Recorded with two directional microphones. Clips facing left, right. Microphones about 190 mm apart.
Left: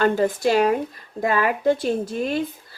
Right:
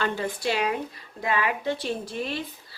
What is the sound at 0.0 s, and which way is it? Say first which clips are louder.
A woman's voice: left 8 dB; 45° left (ahead or behind).